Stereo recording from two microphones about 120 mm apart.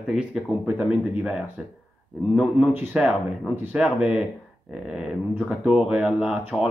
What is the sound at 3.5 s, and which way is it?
Speech, 15° right (ahead or behind).